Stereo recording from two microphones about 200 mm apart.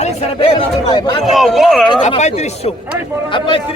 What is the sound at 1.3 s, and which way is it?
Speech, centre (ahead or behind).